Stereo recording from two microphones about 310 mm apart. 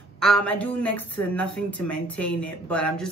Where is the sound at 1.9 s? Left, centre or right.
Centre.